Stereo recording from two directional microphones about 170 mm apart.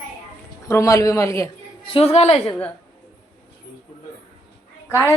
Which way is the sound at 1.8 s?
35° left (ahead or behind).